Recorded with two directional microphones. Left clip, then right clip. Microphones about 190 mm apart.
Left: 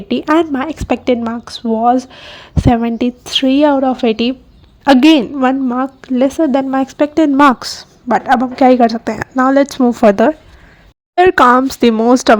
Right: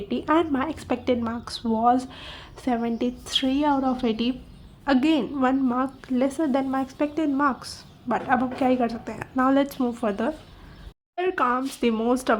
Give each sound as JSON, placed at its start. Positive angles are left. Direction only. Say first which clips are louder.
{"t": 0.1, "sound": "a woman's voice", "louder": "left 10 dB", "side_deg": 40}
{"t": 11.1, "sound": "speech", "louder": "left 16 dB", "side_deg": 55}